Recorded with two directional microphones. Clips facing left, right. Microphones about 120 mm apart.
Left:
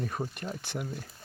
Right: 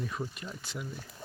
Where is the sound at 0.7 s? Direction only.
55° left (ahead or behind).